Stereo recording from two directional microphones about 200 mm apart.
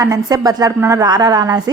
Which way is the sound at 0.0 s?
15° right (ahead or behind).